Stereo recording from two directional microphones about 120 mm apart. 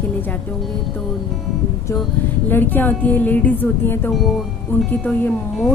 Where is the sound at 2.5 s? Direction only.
15° left (ahead or behind).